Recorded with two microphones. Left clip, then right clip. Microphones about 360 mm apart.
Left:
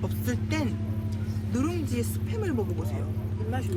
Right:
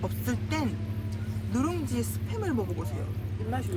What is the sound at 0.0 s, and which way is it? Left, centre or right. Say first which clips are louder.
Speech: left 1 dB; centre.